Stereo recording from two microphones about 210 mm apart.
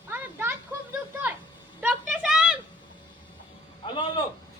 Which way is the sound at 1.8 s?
5° right (ahead or behind).